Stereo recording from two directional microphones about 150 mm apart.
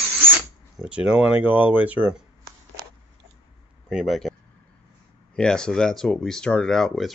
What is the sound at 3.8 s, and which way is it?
Speech, centre (ahead or behind).